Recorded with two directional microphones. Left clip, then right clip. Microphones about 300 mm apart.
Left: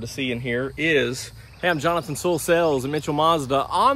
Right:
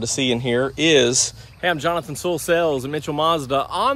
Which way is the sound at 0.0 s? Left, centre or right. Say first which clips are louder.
Right 6 dB; centre.